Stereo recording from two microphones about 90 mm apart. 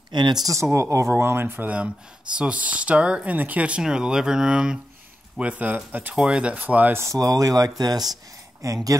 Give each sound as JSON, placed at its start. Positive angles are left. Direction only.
{"t": 0.1, "sound": "speech", "side_deg": -55}
{"t": 0.7, "sound": "speech", "side_deg": -30}
{"t": 7.0, "sound": "speech", "side_deg": -40}